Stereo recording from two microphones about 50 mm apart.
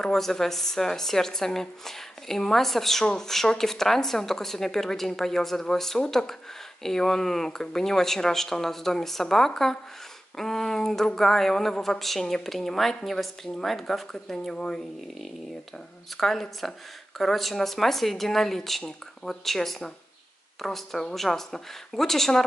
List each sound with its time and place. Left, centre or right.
0.0 s speech: centre
14.3 s speech: centre
16.2 s speech: centre